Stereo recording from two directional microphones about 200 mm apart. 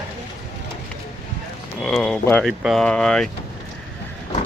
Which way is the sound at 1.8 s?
5° left (ahead or behind).